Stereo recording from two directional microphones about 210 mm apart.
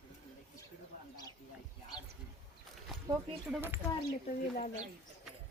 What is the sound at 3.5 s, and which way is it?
Speech, 10° right (ahead or behind).